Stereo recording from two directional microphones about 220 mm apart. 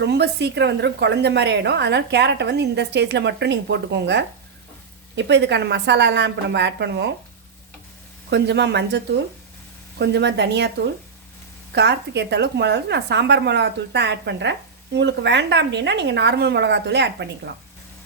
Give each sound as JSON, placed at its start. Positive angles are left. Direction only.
{"t": 0.0, "sound": "a woman's voice", "side_deg": -50}
{"t": 8.3, "sound": "a woman's voice", "side_deg": -50}
{"t": 11.7, "sound": "a woman's voice", "side_deg": -50}